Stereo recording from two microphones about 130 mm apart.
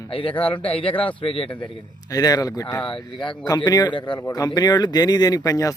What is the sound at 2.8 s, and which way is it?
Speech, 40° left (ahead or behind).